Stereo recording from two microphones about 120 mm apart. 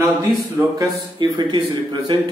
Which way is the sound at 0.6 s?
15° right (ahead or behind).